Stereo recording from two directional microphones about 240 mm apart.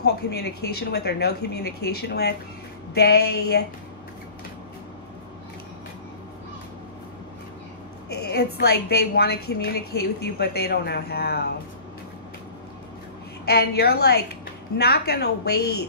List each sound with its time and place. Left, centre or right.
0.0 s a woman's voice: left
8.1 s a woman's voice: left
13.5 s a woman's voice: left